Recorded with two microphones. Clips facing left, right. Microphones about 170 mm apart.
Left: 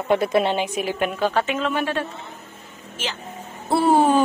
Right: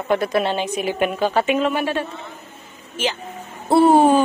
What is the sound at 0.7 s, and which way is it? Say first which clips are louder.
A woman's voice: right 3 dB; 5° right (ahead or behind).